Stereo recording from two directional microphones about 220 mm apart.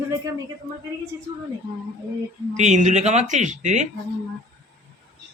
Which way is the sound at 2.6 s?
35° right (ahead or behind).